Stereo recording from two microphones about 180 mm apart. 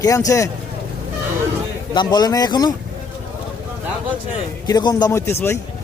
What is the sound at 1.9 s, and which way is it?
Speech, 20° left (ahead or behind).